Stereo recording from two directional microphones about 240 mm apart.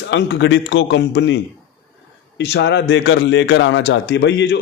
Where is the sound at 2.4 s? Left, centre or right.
Left.